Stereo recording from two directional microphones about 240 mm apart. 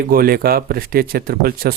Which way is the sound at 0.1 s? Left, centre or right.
Right.